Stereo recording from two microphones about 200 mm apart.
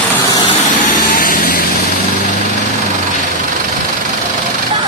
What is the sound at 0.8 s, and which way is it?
Vehicle, 40° left (ahead or behind).